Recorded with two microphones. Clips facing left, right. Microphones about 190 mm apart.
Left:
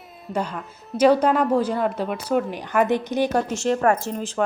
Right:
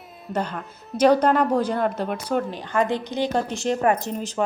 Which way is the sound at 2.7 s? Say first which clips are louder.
Left 3 dB; 20° left (ahead or behind).